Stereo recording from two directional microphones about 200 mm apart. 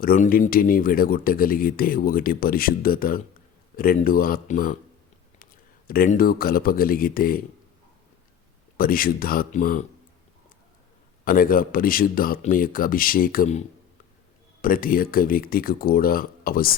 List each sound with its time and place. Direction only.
0.0 s speech: 45° left (ahead or behind)
5.9 s speech: 45° left (ahead or behind)
8.8 s speech: 45° left (ahead or behind)
11.3 s speech: 45° left (ahead or behind)
14.6 s speech: 45° left (ahead or behind)